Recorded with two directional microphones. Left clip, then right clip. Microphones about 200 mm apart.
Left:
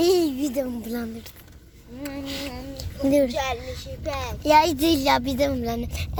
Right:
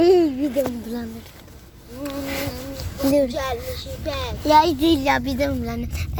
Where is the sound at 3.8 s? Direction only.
25° left (ahead or behind).